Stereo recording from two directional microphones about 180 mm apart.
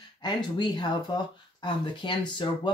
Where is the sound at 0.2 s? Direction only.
25° left (ahead or behind).